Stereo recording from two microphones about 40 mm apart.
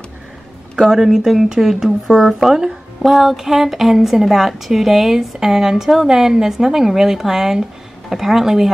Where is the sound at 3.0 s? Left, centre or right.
Centre.